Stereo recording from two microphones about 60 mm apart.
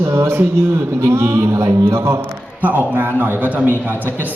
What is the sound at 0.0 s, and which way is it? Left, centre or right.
A man's voice, right.